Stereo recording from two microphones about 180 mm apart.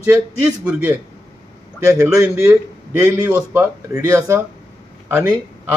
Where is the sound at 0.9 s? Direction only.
15° right (ahead or behind).